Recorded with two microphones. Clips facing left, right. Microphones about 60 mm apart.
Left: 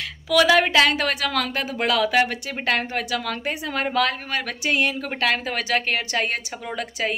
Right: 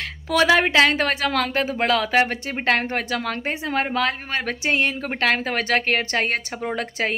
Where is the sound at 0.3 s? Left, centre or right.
Right.